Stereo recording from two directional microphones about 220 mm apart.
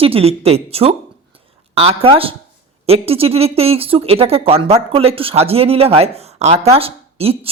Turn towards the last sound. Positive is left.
turn(degrees=-25)  # may be behind; listen again after turning